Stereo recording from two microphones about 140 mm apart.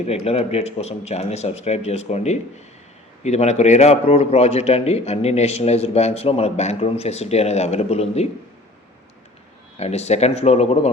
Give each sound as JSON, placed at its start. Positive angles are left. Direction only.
{"t": 0.1, "sound": "a man's voice", "side_deg": 45}
{"t": 9.7, "sound": "a man's voice", "side_deg": 50}